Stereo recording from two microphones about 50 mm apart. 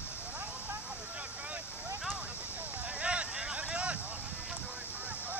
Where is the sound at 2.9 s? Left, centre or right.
Right.